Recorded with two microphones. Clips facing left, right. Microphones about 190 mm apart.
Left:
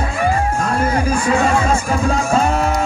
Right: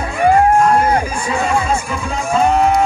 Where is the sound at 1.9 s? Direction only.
40° left (ahead or behind).